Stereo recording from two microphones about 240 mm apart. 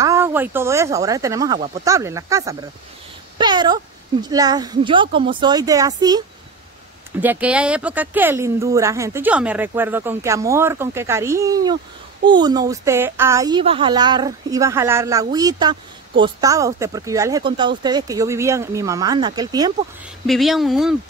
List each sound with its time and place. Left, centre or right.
0.0 s a woman's voice: centre
7.2 s a woman's voice: centre
20.2 s speech: centre